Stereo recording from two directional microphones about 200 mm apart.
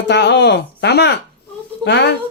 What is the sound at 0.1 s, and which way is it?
A man's voice, 60° left (ahead or behind).